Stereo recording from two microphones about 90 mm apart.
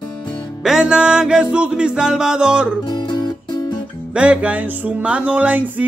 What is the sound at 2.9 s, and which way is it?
Music, 55° left (ahead or behind).